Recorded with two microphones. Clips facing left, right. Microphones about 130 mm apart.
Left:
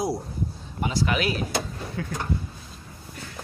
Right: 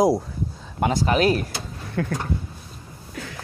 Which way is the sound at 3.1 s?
90° right.